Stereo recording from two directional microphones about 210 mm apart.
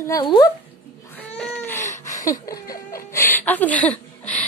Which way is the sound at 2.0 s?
15° left (ahead or behind).